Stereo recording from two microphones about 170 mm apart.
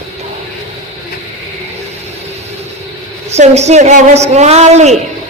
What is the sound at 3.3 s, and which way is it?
Speech, 40° right (ahead or behind).